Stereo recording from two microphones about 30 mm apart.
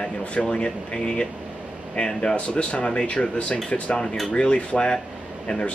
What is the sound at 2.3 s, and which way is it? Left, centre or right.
Speech, left.